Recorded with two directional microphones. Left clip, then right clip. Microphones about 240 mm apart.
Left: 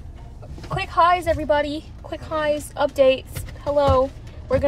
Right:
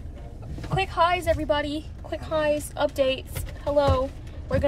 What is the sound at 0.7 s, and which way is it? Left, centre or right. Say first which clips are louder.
Speech: left 5 dB; left.